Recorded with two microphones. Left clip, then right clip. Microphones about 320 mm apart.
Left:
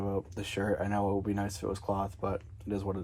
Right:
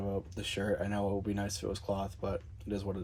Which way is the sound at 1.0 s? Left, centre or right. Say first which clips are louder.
Left 3 dB; left.